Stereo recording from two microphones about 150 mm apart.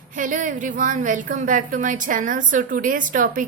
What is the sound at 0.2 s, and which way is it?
A woman's voice, 60° right (ahead or behind).